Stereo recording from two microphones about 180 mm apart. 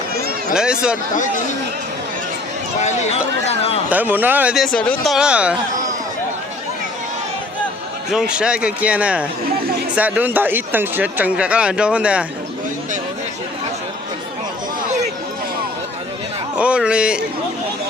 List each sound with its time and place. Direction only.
0.5 s speech: 5° right (ahead or behind)
3.4 s speech: 35° left (ahead or behind)
3.8 s speech: 10° right (ahead or behind)
8.1 s speech: 5° right (ahead or behind)
16.6 s speech: 5° right (ahead or behind)